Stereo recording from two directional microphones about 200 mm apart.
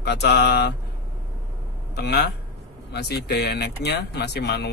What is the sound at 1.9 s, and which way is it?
Speech, 55° left (ahead or behind).